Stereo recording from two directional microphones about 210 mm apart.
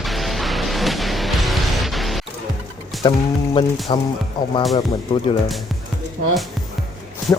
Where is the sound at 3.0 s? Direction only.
20° left (ahead or behind).